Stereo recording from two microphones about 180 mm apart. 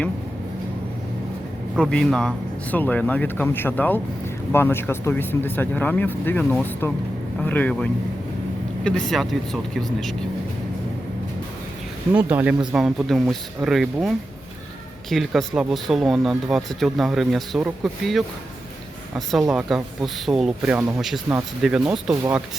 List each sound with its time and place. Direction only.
1.7 s speech: 5° left (ahead or behind)
12.1 s speech: 5° right (ahead or behind)
15.1 s speech: centre (ahead or behind)
22.1 s speech: 15° right (ahead or behind)